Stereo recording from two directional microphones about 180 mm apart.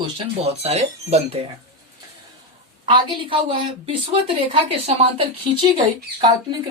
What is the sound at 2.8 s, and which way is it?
Speech, 25° right (ahead or behind).